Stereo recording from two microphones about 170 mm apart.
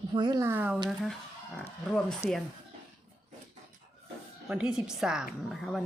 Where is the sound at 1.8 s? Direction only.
5° left (ahead or behind).